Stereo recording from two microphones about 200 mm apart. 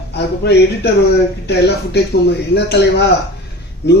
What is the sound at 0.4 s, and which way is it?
Speech, 55° left (ahead or behind).